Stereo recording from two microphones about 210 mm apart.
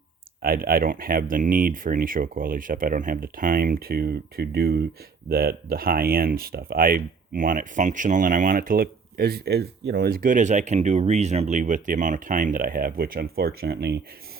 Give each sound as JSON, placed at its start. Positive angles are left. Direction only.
{"t": 0.4, "sound": "speech", "side_deg": -45}